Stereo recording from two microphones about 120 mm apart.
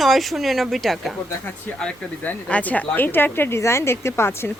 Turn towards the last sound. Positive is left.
turn(degrees=20)  # may be behind; listen again after turning